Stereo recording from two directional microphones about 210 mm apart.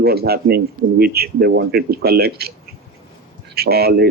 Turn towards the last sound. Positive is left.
turn(degrees=-50)  # may be behind; listen again after turning